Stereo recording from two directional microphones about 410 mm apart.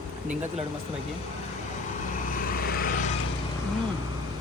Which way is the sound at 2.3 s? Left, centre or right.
Left.